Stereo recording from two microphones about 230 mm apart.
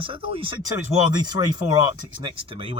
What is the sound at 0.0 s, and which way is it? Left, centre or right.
Speech, right.